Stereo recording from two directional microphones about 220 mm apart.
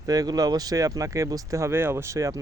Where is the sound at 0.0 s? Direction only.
15° right (ahead or behind).